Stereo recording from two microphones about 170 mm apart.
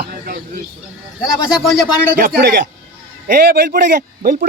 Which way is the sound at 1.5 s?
Centre (ahead or behind).